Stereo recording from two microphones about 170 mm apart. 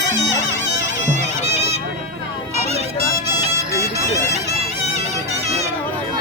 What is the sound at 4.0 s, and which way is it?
Music, 40° right (ahead or behind).